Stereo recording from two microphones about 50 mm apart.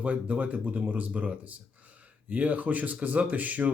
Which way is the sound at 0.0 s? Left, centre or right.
Right.